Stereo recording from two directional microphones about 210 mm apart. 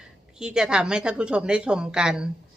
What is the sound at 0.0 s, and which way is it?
A woman's voice, 5° right (ahead or behind).